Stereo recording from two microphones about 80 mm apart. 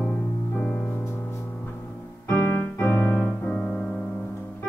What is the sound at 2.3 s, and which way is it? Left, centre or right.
Piano, left.